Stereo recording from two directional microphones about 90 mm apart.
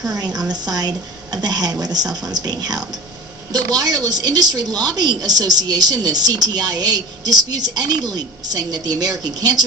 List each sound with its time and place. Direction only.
0.3 s a woman's voice: 50° right (ahead or behind)